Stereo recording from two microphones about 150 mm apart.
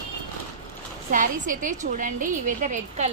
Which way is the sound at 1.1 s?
60° right (ahead or behind).